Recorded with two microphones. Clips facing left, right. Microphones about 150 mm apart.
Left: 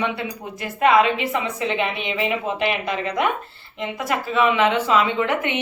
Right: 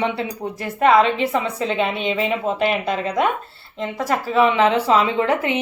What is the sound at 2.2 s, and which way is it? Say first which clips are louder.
A woman's voice: right 1 dB; 35° right (ahead or behind).